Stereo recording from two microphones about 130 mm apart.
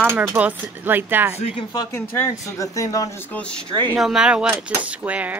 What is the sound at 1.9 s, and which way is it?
Speech, 20° left (ahead or behind).